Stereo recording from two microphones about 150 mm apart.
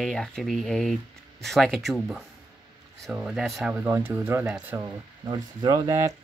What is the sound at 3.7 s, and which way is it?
Speech, 15° right (ahead or behind).